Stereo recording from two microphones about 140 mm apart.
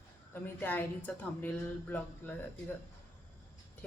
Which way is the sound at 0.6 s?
10° left (ahead or behind).